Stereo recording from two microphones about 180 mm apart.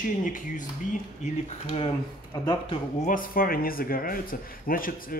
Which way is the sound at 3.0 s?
50° left (ahead or behind).